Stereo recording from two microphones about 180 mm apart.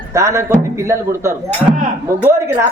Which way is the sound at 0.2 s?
15° right (ahead or behind).